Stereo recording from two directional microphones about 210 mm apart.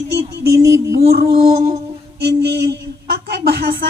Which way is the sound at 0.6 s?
15° right (ahead or behind).